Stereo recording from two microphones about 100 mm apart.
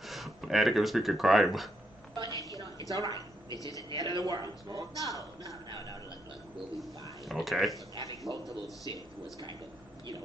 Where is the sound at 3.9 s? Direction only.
45° right (ahead or behind).